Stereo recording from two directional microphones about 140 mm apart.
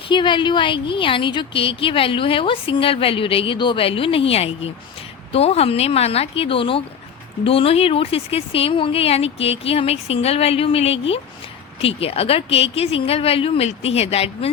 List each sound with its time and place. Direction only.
0.1 s a woman's voice: 35° left (ahead or behind)